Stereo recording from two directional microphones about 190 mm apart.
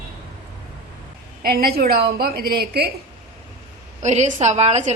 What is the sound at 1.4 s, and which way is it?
A woman's voice, 50° right (ahead or behind).